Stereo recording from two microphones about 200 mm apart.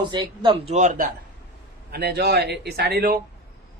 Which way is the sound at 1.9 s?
55° right (ahead or behind).